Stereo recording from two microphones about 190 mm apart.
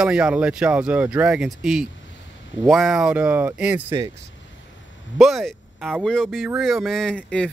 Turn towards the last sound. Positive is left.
turn(degrees=5)  # may be behind; listen again after turning